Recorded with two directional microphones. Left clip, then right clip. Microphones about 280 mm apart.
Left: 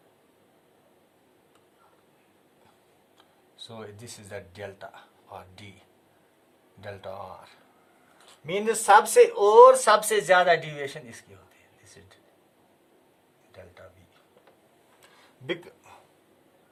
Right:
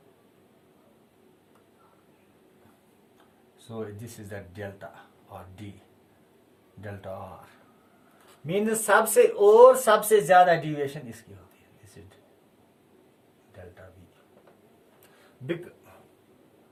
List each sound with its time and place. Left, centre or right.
3.8 s speech: centre
8.4 s speech: centre